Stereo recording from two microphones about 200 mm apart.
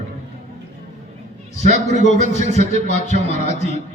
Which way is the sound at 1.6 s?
35° left (ahead or behind).